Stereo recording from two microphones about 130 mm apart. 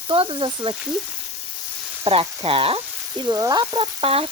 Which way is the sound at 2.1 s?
45° right (ahead or behind).